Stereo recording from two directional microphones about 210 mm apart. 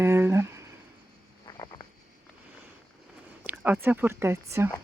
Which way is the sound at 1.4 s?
20° left (ahead or behind).